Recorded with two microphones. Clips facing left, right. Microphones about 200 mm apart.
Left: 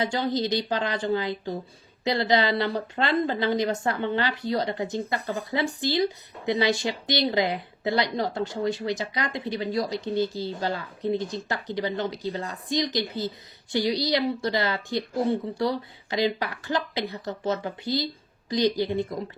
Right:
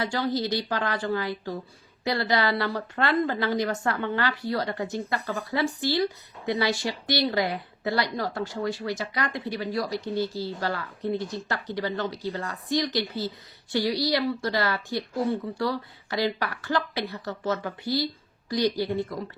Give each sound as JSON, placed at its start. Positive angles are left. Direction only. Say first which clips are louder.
{"t": 0.0, "sound": "a woman's voice", "louder": "left 1 dB", "side_deg": 20}